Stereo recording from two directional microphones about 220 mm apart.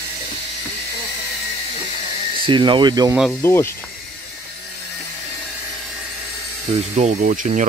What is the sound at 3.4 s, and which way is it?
Speech, 10° left (ahead or behind).